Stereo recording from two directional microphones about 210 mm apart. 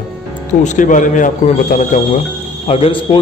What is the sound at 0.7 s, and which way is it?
Speech, 35° left (ahead or behind).